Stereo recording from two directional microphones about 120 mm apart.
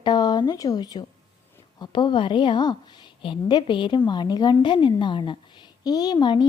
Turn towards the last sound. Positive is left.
turn(degrees=40)  # may be behind; listen again after turning